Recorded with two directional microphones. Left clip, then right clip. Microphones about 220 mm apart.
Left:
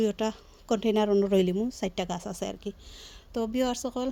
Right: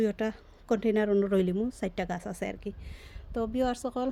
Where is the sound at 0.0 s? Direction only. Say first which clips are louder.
Left 2 dB; 5° left (ahead or behind).